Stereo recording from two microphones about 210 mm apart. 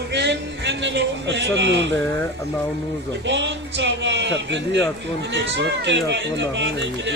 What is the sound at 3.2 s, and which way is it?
Speech, 60° right (ahead or behind).